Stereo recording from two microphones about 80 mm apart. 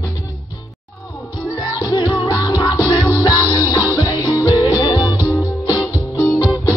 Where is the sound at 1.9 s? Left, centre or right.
Left.